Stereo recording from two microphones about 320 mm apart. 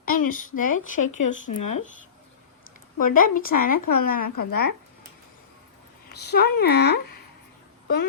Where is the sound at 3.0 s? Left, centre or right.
Left.